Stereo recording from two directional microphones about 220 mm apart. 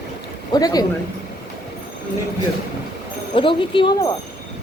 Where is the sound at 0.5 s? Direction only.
15° left (ahead or behind).